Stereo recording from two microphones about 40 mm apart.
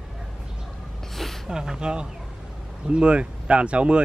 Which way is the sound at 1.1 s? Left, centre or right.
Centre.